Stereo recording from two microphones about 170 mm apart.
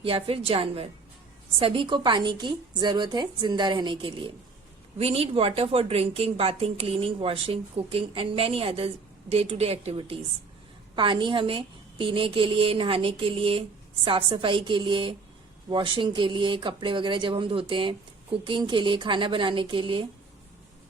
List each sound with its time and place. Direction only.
0.0 s a woman's voice: 35° right (ahead or behind)